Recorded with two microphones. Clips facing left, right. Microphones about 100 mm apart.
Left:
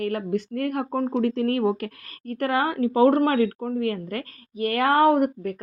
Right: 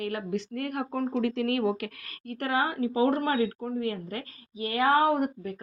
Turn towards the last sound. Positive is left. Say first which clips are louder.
# left 6 dB
turn(degrees=55)  # may be behind; listen again after turning